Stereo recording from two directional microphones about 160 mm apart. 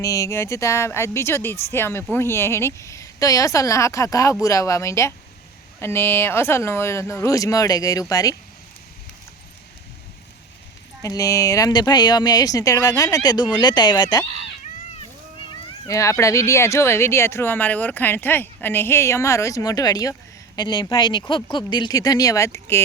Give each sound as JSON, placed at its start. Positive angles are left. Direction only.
{"t": 0.0, "sound": "speech", "side_deg": 20}
{"t": 11.0, "sound": "speech", "side_deg": 20}
{"t": 15.4, "sound": "speech", "side_deg": 20}